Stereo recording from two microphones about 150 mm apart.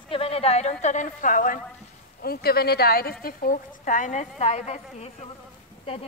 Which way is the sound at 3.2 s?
65° left (ahead or behind).